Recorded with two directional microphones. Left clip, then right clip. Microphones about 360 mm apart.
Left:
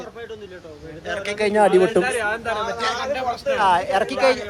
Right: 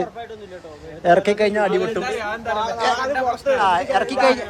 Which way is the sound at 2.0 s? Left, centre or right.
Left.